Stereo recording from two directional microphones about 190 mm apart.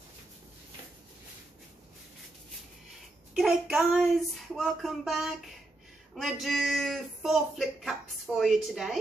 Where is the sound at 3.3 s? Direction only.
5° right (ahead or behind).